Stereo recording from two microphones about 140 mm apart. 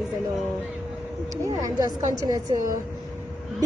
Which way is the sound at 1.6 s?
25° right (ahead or behind).